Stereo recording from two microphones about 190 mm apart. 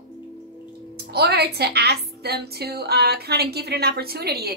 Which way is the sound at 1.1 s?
60° right (ahead or behind).